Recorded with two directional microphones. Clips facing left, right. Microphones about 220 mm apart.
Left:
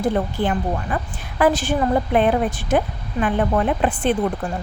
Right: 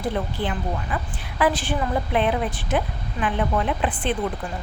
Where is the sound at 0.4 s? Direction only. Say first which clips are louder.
Left 5 dB; 45° left (ahead or behind).